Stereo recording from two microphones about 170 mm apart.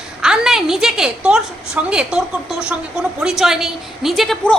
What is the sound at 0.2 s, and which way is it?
A woman's voice, 5° right (ahead or behind).